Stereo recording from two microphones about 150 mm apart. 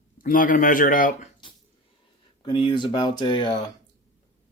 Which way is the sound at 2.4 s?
35° left (ahead or behind).